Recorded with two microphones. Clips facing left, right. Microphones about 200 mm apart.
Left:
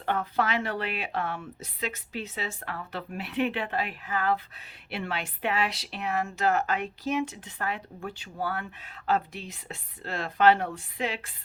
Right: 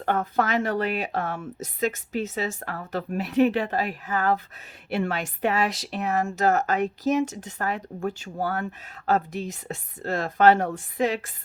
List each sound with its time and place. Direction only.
0.0 s a woman's voice: 45° right (ahead or behind)